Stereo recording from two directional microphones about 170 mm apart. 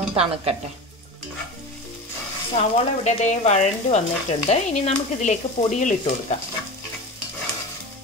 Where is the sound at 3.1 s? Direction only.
45° left (ahead or behind).